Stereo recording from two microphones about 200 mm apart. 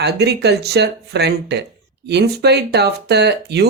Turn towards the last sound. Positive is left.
turn(degrees=-55)  # may be behind; listen again after turning